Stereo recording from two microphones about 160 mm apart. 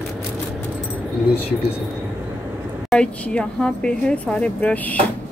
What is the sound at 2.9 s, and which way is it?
Speech, 5° left (ahead or behind).